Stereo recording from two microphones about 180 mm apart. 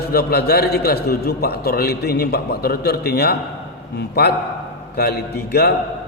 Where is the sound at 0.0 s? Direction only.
60° left (ahead or behind).